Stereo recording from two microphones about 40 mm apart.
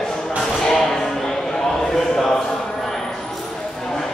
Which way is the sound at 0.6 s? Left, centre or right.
Centre.